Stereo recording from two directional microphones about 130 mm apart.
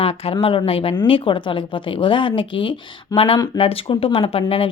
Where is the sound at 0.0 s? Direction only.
45° left (ahead or behind).